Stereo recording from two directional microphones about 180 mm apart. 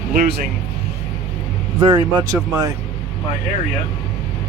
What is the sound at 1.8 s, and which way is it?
Speech, 25° right (ahead or behind).